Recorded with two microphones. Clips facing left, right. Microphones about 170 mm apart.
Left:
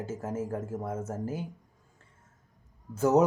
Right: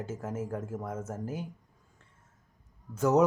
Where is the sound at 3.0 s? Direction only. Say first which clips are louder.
Left 2 dB; 5° left (ahead or behind).